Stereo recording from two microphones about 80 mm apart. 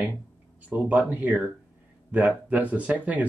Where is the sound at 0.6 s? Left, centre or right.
Centre.